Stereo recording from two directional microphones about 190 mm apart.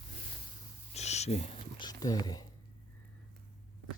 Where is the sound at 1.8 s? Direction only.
20° left (ahead or behind).